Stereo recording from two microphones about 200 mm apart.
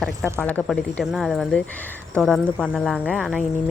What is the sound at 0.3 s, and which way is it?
Speech, 5° left (ahead or behind).